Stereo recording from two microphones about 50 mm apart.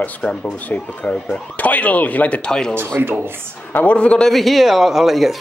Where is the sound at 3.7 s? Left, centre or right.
Left.